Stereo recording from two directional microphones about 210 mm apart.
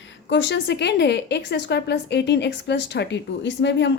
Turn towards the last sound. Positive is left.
turn(degrees=60)  # may be behind; listen again after turning